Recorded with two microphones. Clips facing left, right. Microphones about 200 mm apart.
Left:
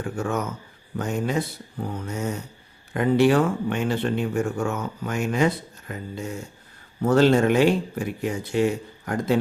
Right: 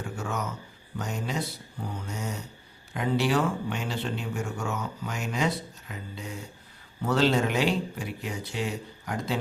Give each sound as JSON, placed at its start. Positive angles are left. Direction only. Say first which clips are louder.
{"t": 0.0, "sound": "speech", "louder": "left 6 dB", "side_deg": 50}